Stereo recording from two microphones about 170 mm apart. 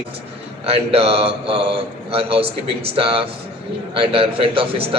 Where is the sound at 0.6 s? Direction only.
35° right (ahead or behind).